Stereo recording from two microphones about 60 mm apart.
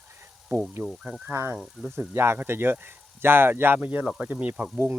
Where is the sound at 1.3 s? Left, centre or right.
Right.